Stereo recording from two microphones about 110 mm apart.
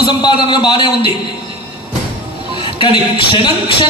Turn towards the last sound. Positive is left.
turn(degrees=45)  # may be behind; listen again after turning